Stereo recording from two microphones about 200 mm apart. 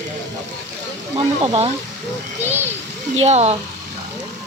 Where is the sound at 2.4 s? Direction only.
10° right (ahead or behind).